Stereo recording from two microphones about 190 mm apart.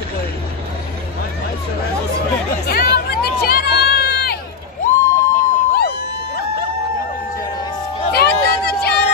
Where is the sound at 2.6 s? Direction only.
50° left (ahead or behind).